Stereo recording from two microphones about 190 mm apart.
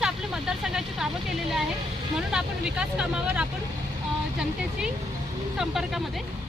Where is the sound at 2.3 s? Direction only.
5° right (ahead or behind).